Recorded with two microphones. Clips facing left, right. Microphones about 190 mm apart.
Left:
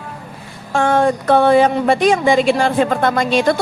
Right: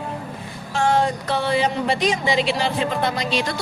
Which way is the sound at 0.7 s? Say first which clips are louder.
Left 5 dB; 55° left (ahead or behind).